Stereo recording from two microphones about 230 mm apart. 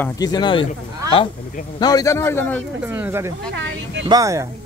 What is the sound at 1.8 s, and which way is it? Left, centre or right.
Speech, centre.